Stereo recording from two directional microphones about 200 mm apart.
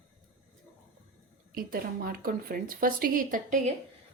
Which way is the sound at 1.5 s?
45° right (ahead or behind).